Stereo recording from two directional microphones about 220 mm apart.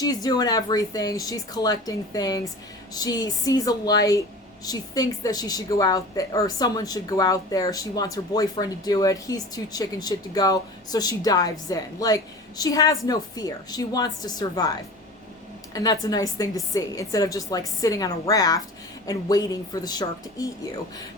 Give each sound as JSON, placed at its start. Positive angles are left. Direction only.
{"t": 0.0, "sound": "a woman's voice", "side_deg": 15}
{"t": 15.7, "sound": "a woman's voice", "side_deg": 15}